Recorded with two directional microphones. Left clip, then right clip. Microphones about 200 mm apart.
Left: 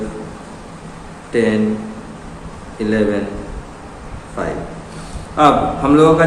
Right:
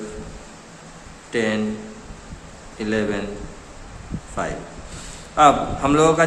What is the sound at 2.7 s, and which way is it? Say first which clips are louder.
Speech: left 6 dB; 40° right (ahead or behind).